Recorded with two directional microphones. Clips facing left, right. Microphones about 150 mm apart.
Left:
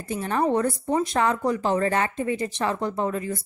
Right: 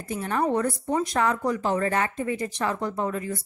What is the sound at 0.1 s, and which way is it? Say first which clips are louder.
A woman's voice: left 2 dB; 30° left (ahead or behind).